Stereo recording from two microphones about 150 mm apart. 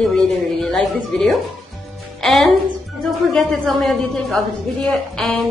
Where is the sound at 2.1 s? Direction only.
Centre (ahead or behind).